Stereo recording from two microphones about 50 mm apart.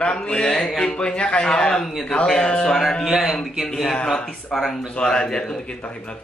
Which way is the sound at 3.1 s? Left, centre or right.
Centre.